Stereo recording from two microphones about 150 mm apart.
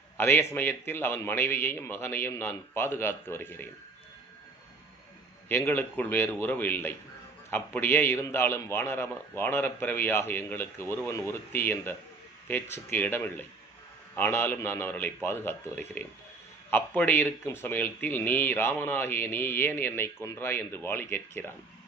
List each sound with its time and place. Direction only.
0.2 s a man's voice: 15° left (ahead or behind)
5.5 s a man's voice: 15° left (ahead or behind)